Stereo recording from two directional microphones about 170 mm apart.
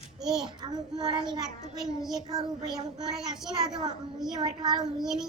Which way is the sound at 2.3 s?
25° right (ahead or behind).